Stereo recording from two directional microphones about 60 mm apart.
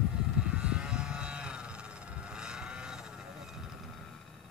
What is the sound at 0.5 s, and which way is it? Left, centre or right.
Vehicle, centre.